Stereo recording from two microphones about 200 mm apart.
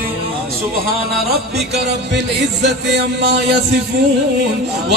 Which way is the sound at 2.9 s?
55° right (ahead or behind).